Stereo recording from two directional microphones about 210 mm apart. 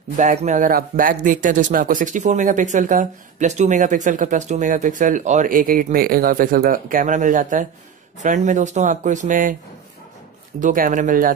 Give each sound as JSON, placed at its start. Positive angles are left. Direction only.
{"t": 0.2, "sound": "speech", "side_deg": -35}
{"t": 10.6, "sound": "speech", "side_deg": -40}